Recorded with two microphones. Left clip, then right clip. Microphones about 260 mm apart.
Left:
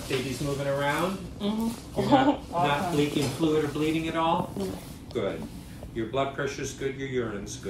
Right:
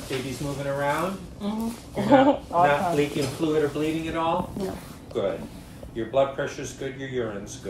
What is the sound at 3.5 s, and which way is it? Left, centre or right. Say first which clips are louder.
Speech: right 3 dB; left.